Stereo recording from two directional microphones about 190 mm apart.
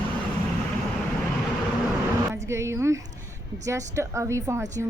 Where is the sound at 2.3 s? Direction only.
15° right (ahead or behind).